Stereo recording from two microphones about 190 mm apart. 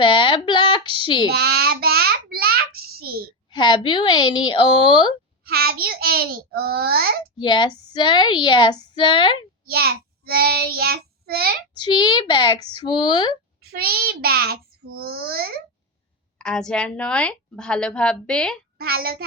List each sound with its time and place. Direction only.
0.0 s speech: 25° left (ahead or behind)
1.3 s a sound: 55° right (ahead or behind)
3.5 s a woman's voice: 25° left (ahead or behind)
5.5 s a child's voice: 55° right (ahead or behind)
7.3 s a woman's voice: 25° left (ahead or behind)
9.6 s child singing: 55° right (ahead or behind)
11.7 s a woman's voice: 25° left (ahead or behind)
13.6 s a child's voice: 55° right (ahead or behind)
16.4 s a woman's voice: 5° left (ahead or behind)